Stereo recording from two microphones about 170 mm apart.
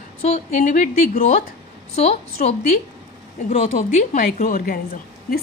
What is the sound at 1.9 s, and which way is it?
Speech, 40° left (ahead or behind).